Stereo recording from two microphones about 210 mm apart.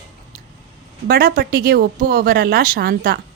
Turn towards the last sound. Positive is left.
turn(degrees=-45)  # may be behind; listen again after turning